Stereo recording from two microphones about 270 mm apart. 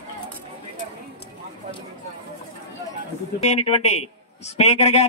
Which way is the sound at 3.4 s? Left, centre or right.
Left.